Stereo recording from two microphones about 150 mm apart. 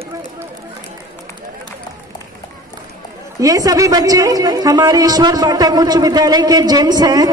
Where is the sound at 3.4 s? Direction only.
25° right (ahead or behind).